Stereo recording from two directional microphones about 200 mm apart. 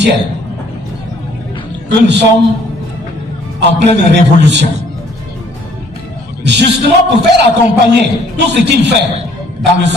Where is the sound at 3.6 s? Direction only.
60° right (ahead or behind).